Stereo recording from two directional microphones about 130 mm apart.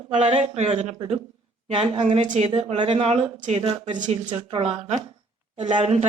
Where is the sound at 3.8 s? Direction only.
35° right (ahead or behind); by 6.1 s 55° right (ahead or behind).